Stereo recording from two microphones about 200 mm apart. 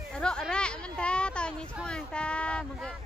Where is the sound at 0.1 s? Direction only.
5° left (ahead or behind).